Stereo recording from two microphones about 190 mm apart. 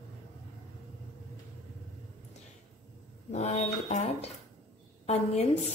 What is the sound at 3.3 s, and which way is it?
A woman's voice, 35° left (ahead or behind).